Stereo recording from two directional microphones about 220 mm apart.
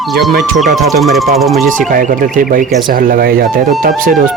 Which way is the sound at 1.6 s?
35° right (ahead or behind).